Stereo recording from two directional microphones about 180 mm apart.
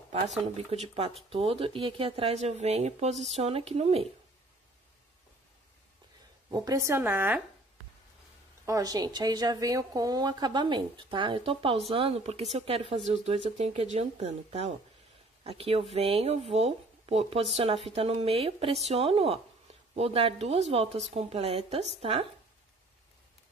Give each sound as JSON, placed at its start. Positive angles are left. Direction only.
{"t": 0.6, "sound": "speech", "side_deg": -35}
{"t": 6.5, "sound": "a woman's voice", "side_deg": -20}
{"t": 8.6, "sound": "a woman's voice", "side_deg": -20}